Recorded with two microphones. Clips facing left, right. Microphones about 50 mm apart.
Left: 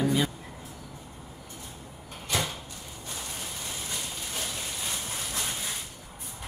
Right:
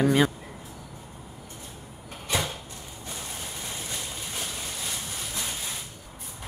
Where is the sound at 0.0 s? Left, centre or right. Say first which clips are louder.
Right 5 dB; right.